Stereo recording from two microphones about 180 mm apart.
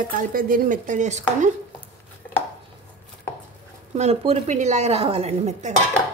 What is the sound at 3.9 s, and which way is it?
A woman's voice, 35° right (ahead or behind).